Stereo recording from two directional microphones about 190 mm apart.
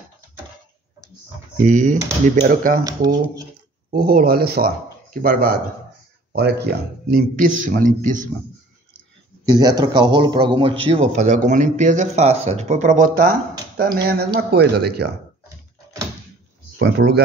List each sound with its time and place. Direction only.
1.6 s speech: 45° right (ahead or behind)
2.8 s speech: 20° right (ahead or behind)
3.9 s speech: 50° right (ahead or behind)
6.3 s speech: 60° right (ahead or behind); by 8.3 s 45° right (ahead or behind)
9.6 s a man's voice: 20° right (ahead or behind); by 15.0 s 60° right (ahead or behind)
16.7 s speech: 60° right (ahead or behind)